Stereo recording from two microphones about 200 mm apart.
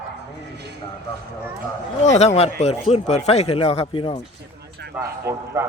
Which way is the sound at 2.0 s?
35° left (ahead or behind).